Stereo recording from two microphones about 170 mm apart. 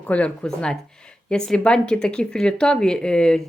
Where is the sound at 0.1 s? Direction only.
5° left (ahead or behind).